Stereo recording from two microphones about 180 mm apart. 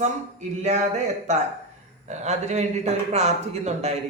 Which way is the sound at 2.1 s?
40° right (ahead or behind).